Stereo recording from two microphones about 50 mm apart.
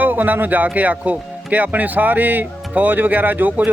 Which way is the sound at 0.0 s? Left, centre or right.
Right.